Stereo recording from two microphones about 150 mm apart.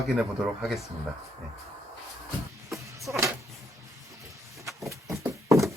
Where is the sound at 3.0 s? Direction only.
20° right (ahead or behind).